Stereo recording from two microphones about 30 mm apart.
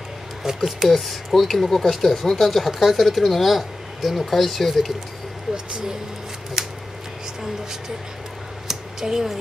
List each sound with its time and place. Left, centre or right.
0.6 s speech: centre
0.8 s speech: centre
2.6 s speech: centre
4.3 s speech: centre
5.5 s speech: right
8.6 s a sound: centre